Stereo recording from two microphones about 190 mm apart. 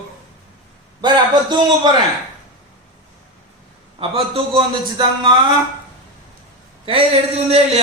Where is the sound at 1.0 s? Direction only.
20° right (ahead or behind).